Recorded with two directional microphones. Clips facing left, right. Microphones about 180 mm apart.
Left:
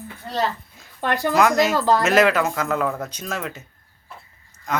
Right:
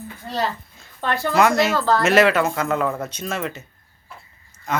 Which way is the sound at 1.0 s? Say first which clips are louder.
Even; 15° left (ahead or behind).